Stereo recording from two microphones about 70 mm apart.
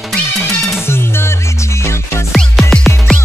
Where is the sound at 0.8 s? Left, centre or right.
Left.